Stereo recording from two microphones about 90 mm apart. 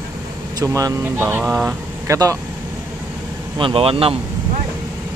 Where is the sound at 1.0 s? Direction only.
25° right (ahead or behind).